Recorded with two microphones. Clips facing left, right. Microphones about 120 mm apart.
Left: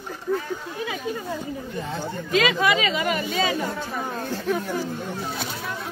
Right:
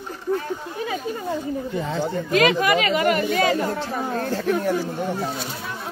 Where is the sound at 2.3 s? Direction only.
55° right (ahead or behind).